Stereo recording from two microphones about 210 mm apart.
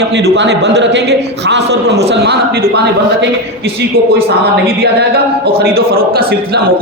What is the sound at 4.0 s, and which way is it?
Speech, 45° right (ahead or behind).